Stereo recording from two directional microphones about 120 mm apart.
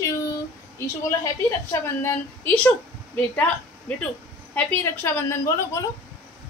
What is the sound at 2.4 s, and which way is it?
Speech, 15° left (ahead or behind).